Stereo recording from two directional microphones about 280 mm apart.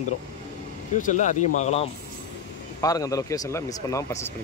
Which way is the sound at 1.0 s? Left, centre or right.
Left.